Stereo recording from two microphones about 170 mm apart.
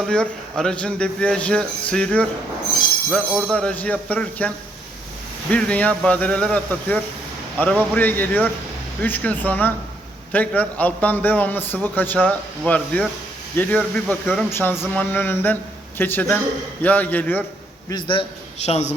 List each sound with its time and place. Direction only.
0.0 s a man's voice: 5° left (ahead or behind)
17.8 s a man's voice: 30° left (ahead or behind)